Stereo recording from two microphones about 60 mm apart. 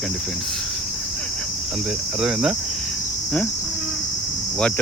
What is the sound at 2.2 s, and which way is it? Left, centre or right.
Speech, centre.